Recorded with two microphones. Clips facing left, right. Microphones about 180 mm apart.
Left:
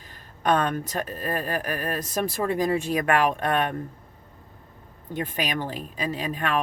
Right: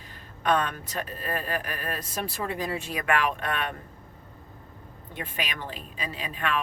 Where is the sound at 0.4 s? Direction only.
45° left (ahead or behind).